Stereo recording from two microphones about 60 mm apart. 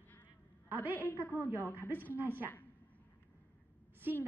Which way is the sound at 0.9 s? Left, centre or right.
Left.